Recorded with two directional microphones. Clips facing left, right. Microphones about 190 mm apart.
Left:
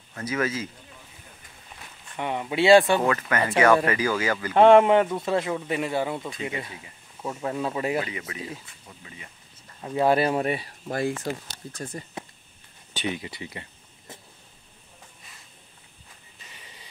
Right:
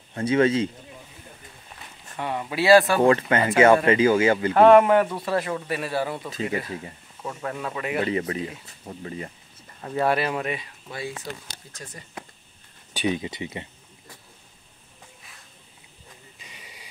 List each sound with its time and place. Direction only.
0.1 s speech: 30° right (ahead or behind)
2.1 s speech: 20° left (ahead or behind)
3.0 s speech: 30° right (ahead or behind)
4.6 s speech: 25° left (ahead or behind)
7.2 s speech: 15° left (ahead or behind)
7.6 s speech: 30° left (ahead or behind)
8.0 s speech: 35° right (ahead or behind)
10.0 s speech: 30° left (ahead or behind)
11.0 s speech: 50° left (ahead or behind)
11.8 s speech: 30° left (ahead or behind)
12.9 s speech: 15° right (ahead or behind)
16.4 s a sound: 10° right (ahead or behind)